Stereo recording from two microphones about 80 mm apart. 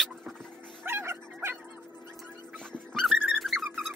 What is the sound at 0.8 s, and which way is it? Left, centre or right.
Dog, right.